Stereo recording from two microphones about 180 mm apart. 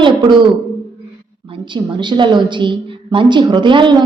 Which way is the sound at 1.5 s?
25° right (ahead or behind).